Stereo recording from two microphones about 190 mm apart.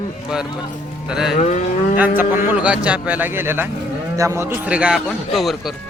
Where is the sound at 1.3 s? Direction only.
40° left (ahead or behind).